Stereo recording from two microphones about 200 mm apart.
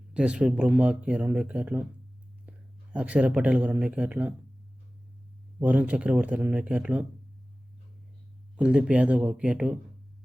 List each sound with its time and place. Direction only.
0.1 s a man's voice: 5° right (ahead or behind)
5.5 s speech: 5° right (ahead or behind)
8.5 s speech: 5° right (ahead or behind)